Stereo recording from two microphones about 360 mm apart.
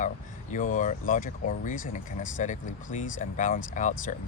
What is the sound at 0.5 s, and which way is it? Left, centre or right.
Speech, left.